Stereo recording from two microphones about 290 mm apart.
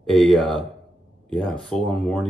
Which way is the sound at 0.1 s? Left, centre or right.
Centre.